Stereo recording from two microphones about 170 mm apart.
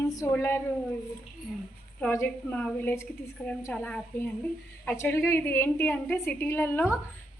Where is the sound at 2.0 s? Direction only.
10° left (ahead or behind).